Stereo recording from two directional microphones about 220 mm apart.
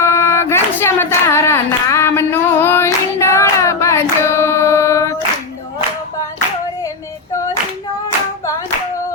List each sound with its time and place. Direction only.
0.0 s hands: 10° left (ahead or behind)